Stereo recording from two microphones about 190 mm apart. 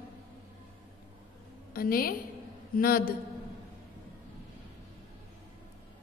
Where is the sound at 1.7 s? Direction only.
50° left (ahead or behind).